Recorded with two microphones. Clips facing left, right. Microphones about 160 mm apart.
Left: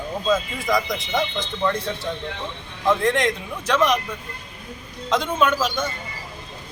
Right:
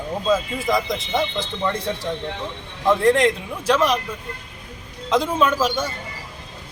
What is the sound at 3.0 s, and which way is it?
Speech, 35° right (ahead or behind).